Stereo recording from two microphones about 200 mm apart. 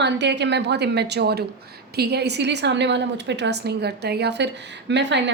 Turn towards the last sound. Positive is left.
turn(degrees=-60)  # may be behind; listen again after turning